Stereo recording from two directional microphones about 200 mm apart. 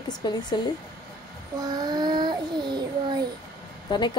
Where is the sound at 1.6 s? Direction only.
20° right (ahead or behind).